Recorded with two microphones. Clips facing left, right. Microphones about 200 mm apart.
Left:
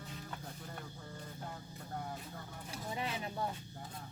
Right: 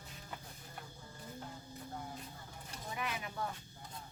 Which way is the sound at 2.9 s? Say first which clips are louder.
Left 1 dB; 30° left (ahead or behind).